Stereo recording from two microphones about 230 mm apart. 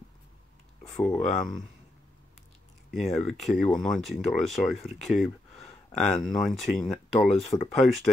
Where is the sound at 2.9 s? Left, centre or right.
Centre.